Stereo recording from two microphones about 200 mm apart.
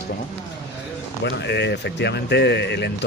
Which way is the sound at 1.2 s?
60° left (ahead or behind).